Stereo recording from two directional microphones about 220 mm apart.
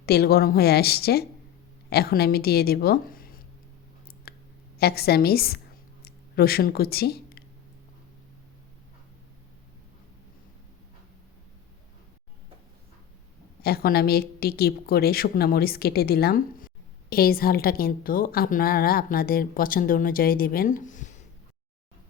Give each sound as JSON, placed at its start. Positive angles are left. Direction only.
{"t": 0.0, "sound": "a woman's voice", "side_deg": 45}
{"t": 4.3, "sound": "clicking", "side_deg": 45}
{"t": 4.8, "sound": "a woman's voice", "side_deg": 45}
{"t": 6.0, "sound": "a sound", "side_deg": 45}
{"t": 13.6, "sound": "a woman's voice", "side_deg": 45}